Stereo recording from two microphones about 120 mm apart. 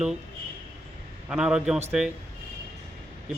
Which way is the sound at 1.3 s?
5° right (ahead or behind).